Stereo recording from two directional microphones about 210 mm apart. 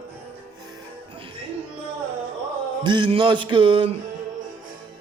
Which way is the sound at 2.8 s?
20° right (ahead or behind).